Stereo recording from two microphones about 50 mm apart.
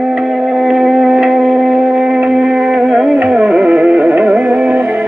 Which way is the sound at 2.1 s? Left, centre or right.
Centre.